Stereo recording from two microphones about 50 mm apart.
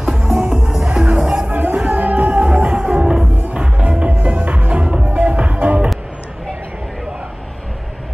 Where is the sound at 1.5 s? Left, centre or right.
Right.